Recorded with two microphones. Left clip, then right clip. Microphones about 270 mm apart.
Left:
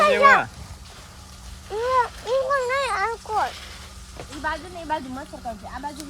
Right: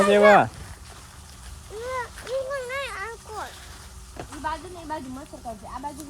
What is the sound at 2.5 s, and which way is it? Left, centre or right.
Cat, left.